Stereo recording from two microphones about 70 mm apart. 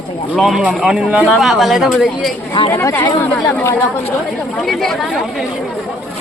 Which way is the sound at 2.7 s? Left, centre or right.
Left.